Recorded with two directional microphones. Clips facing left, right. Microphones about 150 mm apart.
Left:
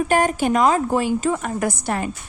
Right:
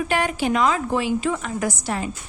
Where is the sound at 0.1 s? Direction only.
45° left (ahead or behind).